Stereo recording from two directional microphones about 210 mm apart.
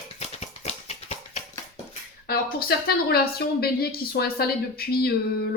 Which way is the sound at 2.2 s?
45° left (ahead or behind).